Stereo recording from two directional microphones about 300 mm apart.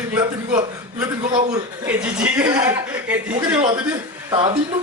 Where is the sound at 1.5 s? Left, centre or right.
Centre.